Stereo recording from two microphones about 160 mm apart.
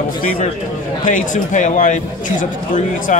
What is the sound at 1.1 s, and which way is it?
A man's voice, 55° left (ahead or behind).